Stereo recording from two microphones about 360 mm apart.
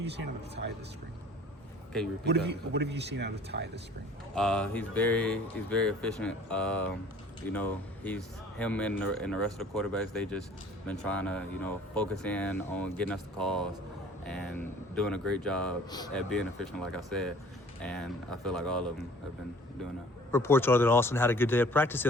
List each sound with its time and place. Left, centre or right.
2.2 s a man's voice: right
4.4 s speech: centre
20.3 s speech: centre